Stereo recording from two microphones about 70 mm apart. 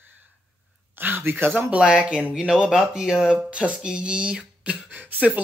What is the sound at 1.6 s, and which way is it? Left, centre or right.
Speech, centre.